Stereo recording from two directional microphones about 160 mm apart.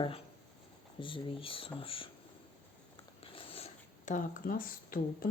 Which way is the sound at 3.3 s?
40° left (ahead or behind).